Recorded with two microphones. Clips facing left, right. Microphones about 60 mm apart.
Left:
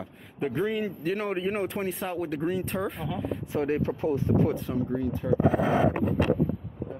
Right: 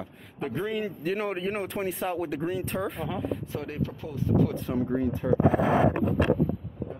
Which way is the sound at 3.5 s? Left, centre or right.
Left.